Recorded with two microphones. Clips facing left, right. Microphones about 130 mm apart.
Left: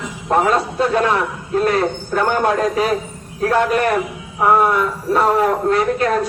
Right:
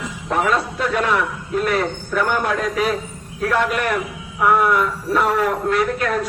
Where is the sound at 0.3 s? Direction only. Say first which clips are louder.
Left 4 dB; 35° left (ahead or behind).